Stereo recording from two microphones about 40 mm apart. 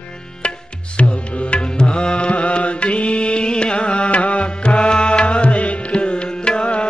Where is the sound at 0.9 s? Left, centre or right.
Left.